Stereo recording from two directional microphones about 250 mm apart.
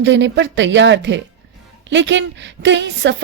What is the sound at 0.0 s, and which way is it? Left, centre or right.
Speech, right.